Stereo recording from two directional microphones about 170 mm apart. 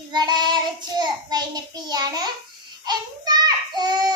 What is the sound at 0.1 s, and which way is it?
Child singing, 25° right (ahead or behind).